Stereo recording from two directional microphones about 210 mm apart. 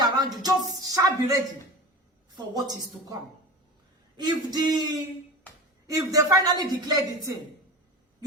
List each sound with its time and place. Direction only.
0.0 s a sound: 20° right (ahead or behind)
2.3 s a woman's voice: 20° right (ahead or behind)
4.2 s a woman's voice: 20° right (ahead or behind)
5.9 s speech: 15° right (ahead or behind)